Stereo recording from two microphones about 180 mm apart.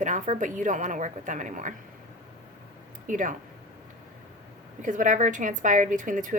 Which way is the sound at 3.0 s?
45° right (ahead or behind).